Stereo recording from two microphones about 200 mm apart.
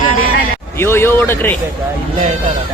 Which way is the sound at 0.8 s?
10° left (ahead or behind).